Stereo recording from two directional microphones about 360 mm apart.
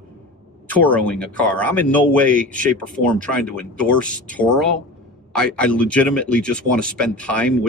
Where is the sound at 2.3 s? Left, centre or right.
Right.